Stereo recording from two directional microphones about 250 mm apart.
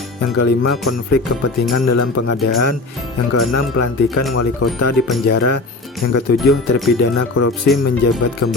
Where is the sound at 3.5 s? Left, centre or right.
Left.